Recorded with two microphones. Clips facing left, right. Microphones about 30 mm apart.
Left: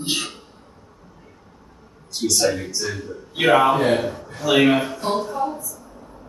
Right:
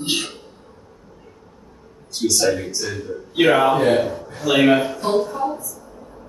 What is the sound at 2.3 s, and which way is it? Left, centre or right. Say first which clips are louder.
Speech: even; centre.